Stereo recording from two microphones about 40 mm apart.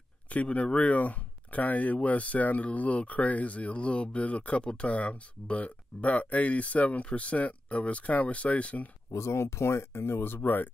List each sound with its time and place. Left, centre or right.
0.3 s speech: left
9.4 s speech: left